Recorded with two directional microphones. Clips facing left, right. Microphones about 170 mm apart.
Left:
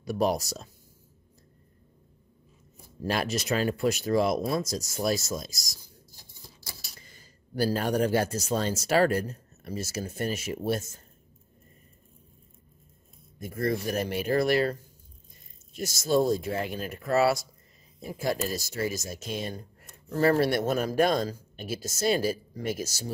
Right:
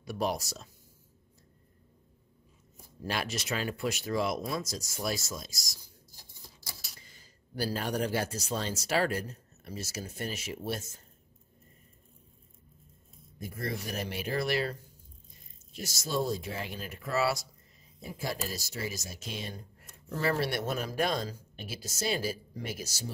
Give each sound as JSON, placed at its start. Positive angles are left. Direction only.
{"t": 0.0, "sound": "speech", "side_deg": 40}
{"t": 3.1, "sound": "speech", "side_deg": 40}
{"t": 7.0, "sound": "speech", "side_deg": 50}
{"t": 13.6, "sound": "speech", "side_deg": 45}
{"t": 15.8, "sound": "speech", "side_deg": 50}